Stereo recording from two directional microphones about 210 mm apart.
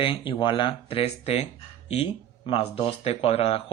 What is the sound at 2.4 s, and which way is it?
A man's voice, 25° left (ahead or behind).